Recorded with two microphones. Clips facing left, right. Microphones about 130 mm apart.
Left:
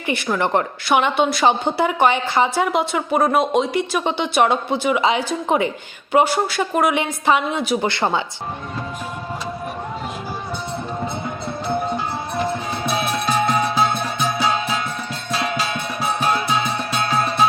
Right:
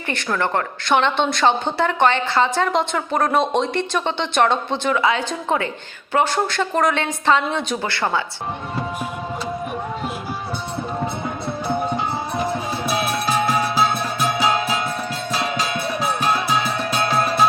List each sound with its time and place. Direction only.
0.1 s a woman's voice: 10° left (ahead or behind)
7.8 s speech: 20° left (ahead or behind)
12.8 s music: 5° right (ahead or behind)